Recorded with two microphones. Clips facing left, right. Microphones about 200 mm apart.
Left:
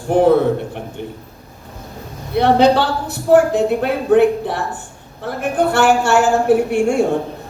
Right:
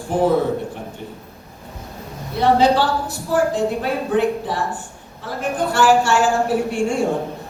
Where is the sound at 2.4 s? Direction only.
65° left (ahead or behind).